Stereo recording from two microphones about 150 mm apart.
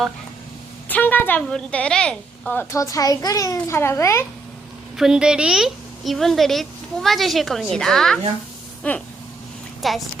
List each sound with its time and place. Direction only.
0.9 s a woman's voice: 10° left (ahead or behind)
4.9 s a woman's voice: 5° right (ahead or behind)